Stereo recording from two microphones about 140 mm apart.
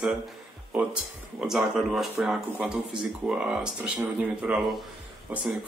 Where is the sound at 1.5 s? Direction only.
Centre (ahead or behind).